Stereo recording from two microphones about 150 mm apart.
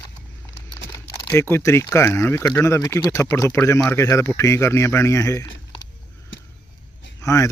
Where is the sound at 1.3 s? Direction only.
20° left (ahead or behind).